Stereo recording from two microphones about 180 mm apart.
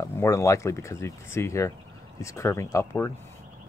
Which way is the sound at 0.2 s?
15° left (ahead or behind).